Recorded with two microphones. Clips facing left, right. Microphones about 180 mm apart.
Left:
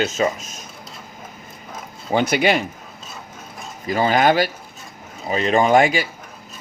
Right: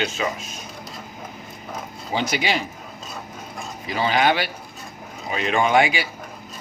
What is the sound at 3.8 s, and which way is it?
Speech, 45° left (ahead or behind).